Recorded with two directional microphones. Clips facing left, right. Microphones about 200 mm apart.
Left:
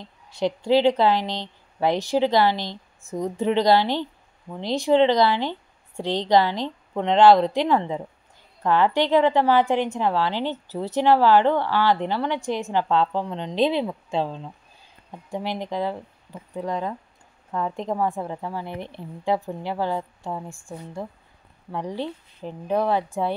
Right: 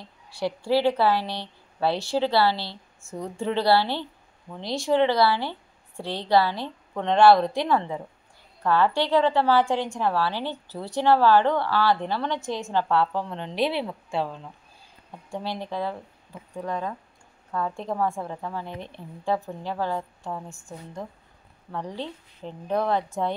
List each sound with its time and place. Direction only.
0.3 s a woman's voice: 20° left (ahead or behind)